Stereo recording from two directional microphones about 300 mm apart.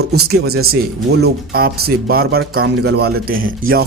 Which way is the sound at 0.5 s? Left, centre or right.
Right.